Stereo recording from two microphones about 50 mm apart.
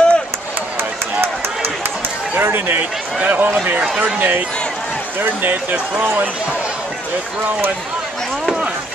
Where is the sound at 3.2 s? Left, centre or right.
Right.